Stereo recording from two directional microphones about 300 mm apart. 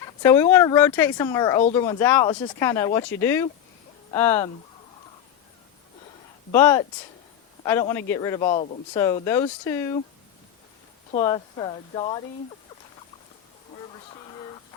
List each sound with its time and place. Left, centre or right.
0.0 s a sound: centre
0.5 s speech: centre
6.5 s speech: centre
11.2 s speech: centre